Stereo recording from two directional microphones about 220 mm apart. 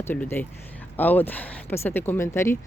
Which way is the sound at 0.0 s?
10° left (ahead or behind).